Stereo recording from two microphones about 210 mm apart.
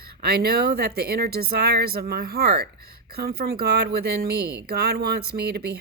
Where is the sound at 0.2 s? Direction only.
50° right (ahead or behind).